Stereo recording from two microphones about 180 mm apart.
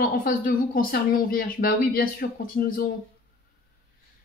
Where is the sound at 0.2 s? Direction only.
50° left (ahead or behind).